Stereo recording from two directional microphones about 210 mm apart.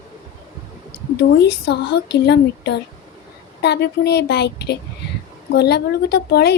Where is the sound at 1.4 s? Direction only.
50° left (ahead or behind).